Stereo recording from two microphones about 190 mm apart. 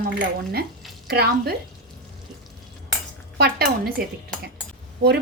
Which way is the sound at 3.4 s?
55° right (ahead or behind).